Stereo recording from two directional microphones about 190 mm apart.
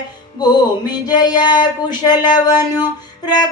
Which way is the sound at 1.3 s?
20° left (ahead or behind).